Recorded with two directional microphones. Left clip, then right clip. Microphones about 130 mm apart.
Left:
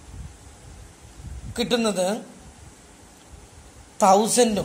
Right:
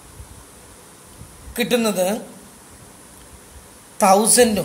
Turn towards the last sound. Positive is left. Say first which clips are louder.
# right 4 dB
turn(degrees=20)  # may be behind; listen again after turning